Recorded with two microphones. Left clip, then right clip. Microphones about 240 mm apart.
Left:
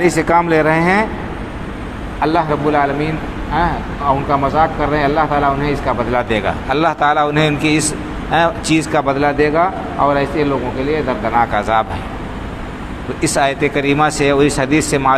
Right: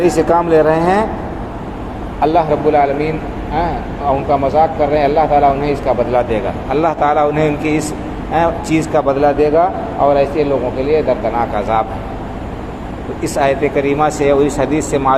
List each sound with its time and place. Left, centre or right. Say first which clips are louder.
0.0 s a man's voice: right 1 dB; left
2.2 s a man's voice: right 3 dB; left
4.3 s a man's voice: right 4 dB; left
13.2 s speech: right 1 dB; left